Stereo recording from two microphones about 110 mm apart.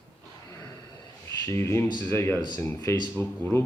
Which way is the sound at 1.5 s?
25° left (ahead or behind).